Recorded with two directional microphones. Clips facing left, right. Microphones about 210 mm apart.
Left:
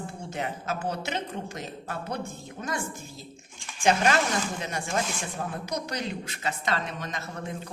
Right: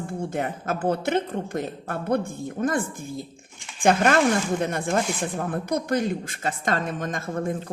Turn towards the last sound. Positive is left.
turn(degrees=-50)  # may be behind; listen again after turning